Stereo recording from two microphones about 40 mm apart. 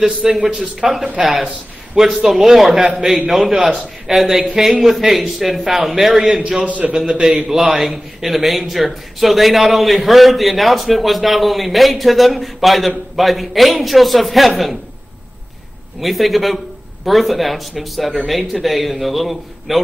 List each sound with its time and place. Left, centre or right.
0.3 s a man's voice: centre
1.2 s a man's voice: centre
6.6 s a man's voice: right
7.1 s a man's voice: centre
16.0 s a man's voice: centre